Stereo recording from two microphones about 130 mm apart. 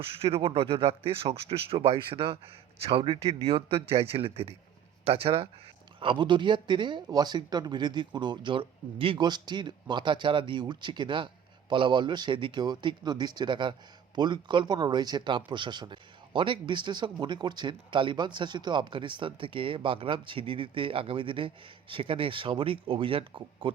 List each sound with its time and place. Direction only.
0.0 s a man's voice: 45° right (ahead or behind)